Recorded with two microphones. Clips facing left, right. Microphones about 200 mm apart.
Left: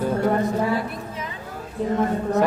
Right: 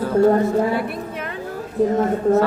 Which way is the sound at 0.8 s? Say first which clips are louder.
Right 4 dB; 65° right (ahead or behind).